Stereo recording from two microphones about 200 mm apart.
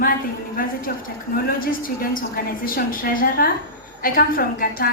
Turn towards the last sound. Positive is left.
turn(degrees=45)  # may be behind; listen again after turning